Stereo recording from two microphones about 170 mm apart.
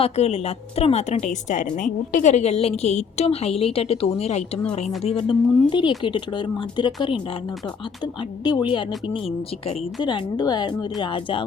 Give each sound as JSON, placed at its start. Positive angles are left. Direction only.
{"t": 0.0, "sound": "a woman's voice", "side_deg": 35}